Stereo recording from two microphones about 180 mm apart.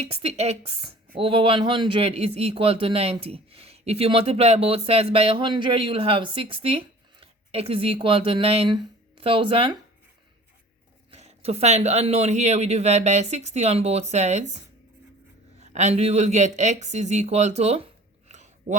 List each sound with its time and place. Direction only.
0.0 s speech: 35° right (ahead or behind)
11.1 s speech: 35° right (ahead or behind)
18.3 s a sound: 40° right (ahead or behind)